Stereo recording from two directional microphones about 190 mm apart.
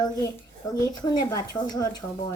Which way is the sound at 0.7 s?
20° left (ahead or behind).